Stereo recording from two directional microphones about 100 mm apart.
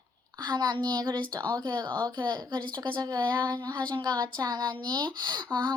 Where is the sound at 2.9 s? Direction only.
45° right (ahead or behind).